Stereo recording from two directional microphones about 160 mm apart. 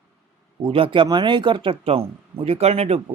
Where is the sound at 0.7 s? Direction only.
35° right (ahead or behind).